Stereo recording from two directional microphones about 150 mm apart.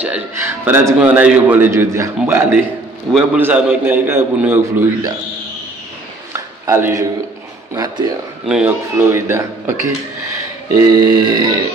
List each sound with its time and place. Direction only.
0.0 s a man's voice: 10° right (ahead or behind)
6.3 s a sound: 15° right (ahead or behind)
7.7 s burping: 25° right (ahead or behind)
8.5 s a man's voice: 5° right (ahead or behind)
8.9 s a man's voice: 20° right (ahead or behind)
10.8 s burping: 25° right (ahead or behind)